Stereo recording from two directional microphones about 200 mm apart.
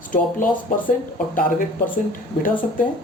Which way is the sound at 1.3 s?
45° left (ahead or behind).